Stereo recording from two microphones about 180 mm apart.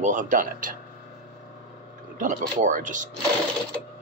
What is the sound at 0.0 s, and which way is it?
Speech, 45° right (ahead or behind).